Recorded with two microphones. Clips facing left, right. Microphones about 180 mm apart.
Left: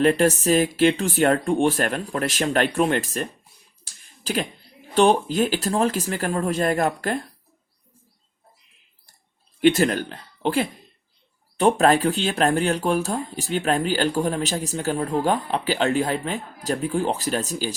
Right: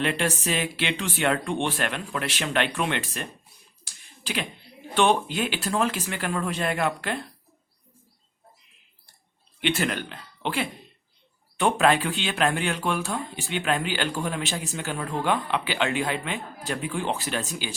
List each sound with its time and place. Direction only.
0.0 s speech: 40° left (ahead or behind)
4.0 s a sound: 40° left (ahead or behind)
4.9 s speech: 40° left (ahead or behind)
9.6 s speech: 40° left (ahead or behind)